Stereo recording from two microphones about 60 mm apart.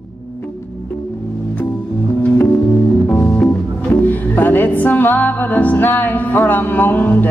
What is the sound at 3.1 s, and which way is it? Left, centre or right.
Music, left.